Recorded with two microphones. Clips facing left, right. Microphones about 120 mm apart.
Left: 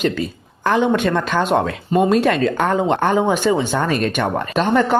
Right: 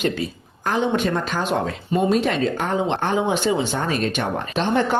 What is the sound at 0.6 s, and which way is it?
Speech, 70° left (ahead or behind).